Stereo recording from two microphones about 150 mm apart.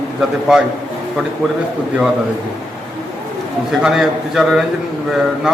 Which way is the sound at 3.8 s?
5° right (ahead or behind).